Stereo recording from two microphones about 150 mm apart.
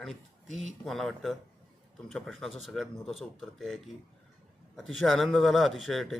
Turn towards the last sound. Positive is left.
turn(degrees=0)  # may be behind; listen again after turning